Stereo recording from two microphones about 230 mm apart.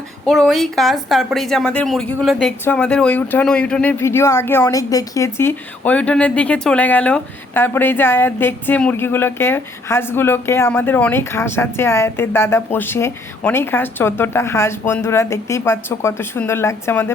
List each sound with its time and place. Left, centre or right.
0.3 s speech: centre